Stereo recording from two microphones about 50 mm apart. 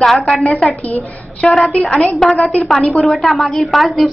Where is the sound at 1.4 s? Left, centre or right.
Left.